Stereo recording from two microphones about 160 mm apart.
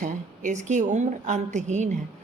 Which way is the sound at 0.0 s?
50° right (ahead or behind).